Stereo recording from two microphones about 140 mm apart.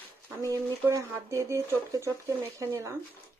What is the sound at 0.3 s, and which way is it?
Speech, 20° right (ahead or behind).